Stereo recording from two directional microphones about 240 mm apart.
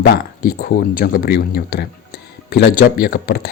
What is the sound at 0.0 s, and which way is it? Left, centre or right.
A man's voice, left.